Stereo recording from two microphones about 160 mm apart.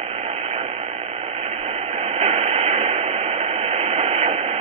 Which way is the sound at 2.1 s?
40° right (ahead or behind).